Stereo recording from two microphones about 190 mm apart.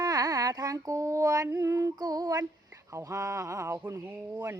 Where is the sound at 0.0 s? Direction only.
20° right (ahead or behind).